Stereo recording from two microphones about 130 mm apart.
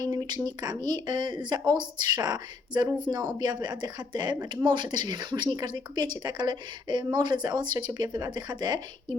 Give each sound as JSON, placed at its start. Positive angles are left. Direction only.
{"t": 0.0, "sound": "speech", "side_deg": -30}